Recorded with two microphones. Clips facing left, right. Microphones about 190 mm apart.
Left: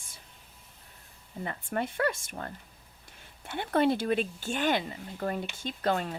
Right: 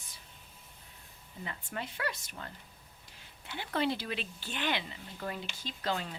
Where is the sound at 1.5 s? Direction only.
50° left (ahead or behind).